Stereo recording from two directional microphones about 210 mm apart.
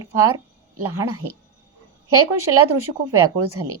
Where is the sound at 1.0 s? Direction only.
90° right.